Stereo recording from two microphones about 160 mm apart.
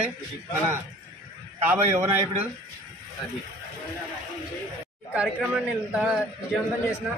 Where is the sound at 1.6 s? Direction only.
15° right (ahead or behind).